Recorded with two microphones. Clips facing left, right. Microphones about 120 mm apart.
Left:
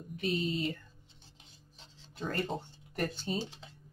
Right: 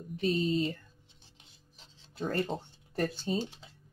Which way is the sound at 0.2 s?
35° right (ahead or behind).